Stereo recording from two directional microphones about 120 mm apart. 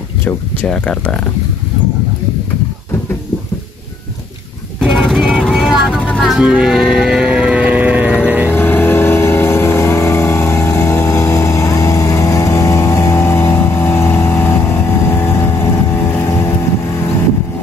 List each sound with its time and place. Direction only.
0.2 s speech: 15° left (ahead or behind)
4.7 s vehicle: centre (ahead or behind)
5.9 s vehicle: 10° left (ahead or behind)
6.2 s music: 5° right (ahead or behind)
8.5 s vehicle: 15° left (ahead or behind)